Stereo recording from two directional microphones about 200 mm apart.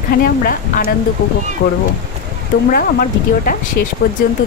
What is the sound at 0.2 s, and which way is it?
Speech, 45° left (ahead or behind).